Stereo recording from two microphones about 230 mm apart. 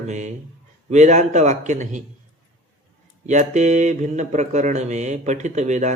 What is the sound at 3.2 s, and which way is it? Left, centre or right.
Speech, right.